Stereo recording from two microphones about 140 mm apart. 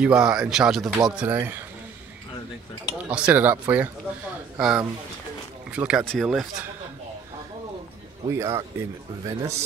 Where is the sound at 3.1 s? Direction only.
10° right (ahead or behind).